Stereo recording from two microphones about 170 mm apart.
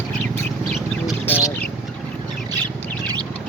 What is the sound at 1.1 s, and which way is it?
Bird, 15° left (ahead or behind).